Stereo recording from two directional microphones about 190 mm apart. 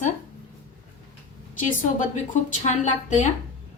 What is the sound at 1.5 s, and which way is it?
Speech, 45° left (ahead or behind).